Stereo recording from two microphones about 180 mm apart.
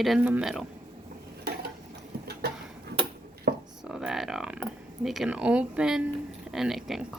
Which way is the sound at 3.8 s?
5° right (ahead or behind).